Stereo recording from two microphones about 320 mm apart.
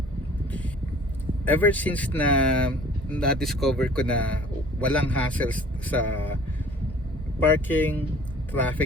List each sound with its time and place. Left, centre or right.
1.5 s speech: centre
7.4 s speech: centre